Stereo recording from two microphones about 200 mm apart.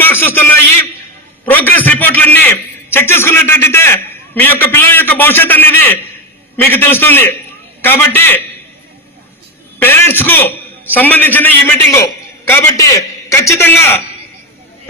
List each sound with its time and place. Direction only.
0.0 s a sound: 10° left (ahead or behind)
1.5 s a man's voice: 10° left (ahead or behind)
9.8 s a man's voice: 10° left (ahead or behind)